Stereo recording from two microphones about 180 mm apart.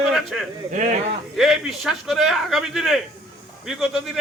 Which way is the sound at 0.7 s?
45° right (ahead or behind).